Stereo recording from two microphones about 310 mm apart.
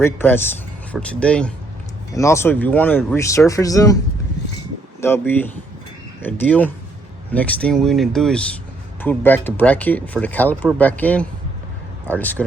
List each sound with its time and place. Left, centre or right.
0.0 s speech: centre
4.9 s speech: centre